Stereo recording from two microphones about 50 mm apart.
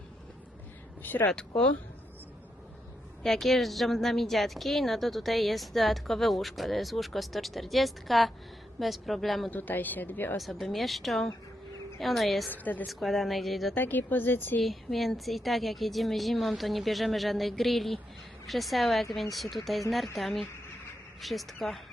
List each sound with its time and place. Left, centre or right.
1.0 s speech: left
1.3 s speech: centre
3.2 s a woman's voice: centre
9.5 s speech: left
10.3 s a woman's voice: centre
12.5 s speech: left
12.9 s a woman's voice: centre
13.7 s speech: left
14.6 s a woman's voice: centre